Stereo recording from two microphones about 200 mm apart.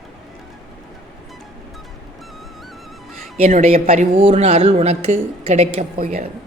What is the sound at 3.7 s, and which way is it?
A man's voice, 30° right (ahead or behind).